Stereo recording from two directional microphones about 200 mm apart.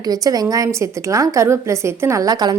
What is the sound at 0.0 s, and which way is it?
A woman's voice, 20° right (ahead or behind).